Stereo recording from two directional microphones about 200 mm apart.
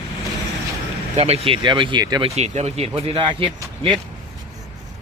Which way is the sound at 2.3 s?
35° right (ahead or behind).